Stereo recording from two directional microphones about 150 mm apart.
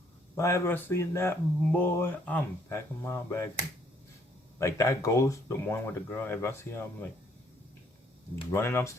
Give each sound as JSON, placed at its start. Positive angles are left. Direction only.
{"t": 0.3, "sound": "speech", "side_deg": 20}
{"t": 4.6, "sound": "speech", "side_deg": 20}
{"t": 8.5, "sound": "speech", "side_deg": 15}